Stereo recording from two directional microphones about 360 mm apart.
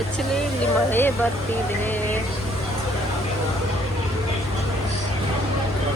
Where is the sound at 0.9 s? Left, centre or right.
Centre.